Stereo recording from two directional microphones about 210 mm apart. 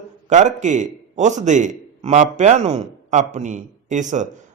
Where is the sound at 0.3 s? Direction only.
35° right (ahead or behind).